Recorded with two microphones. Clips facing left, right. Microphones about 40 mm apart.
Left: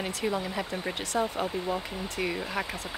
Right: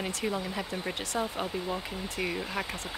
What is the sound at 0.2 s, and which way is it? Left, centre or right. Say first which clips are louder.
Speech: left 4 dB; centre.